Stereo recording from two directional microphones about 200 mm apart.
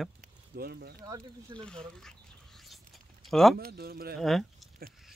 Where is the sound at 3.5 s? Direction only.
50° right (ahead or behind).